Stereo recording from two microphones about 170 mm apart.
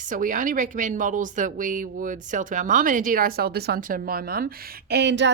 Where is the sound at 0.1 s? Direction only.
50° right (ahead or behind).